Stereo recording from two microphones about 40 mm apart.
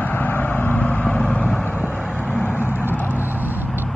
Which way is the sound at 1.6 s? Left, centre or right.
Left.